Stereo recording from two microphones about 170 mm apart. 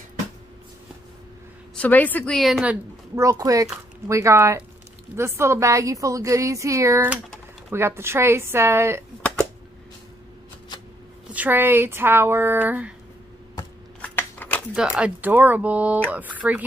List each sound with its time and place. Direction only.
1.8 s a woman's voice: 10° left (ahead or behind); by 9.0 s 15° right (ahead or behind)
11.3 s a woman's voice: 10° right (ahead or behind)
14.0 s scissors: 10° left (ahead or behind)
14.7 s a woman's voice: 5° right (ahead or behind)